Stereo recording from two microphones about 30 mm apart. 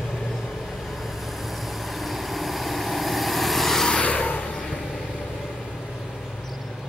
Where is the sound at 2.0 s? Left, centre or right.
Centre.